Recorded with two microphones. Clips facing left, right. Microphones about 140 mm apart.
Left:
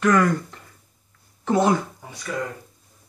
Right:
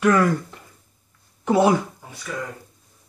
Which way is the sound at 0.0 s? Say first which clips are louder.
Right 1 dB; 10° right (ahead or behind).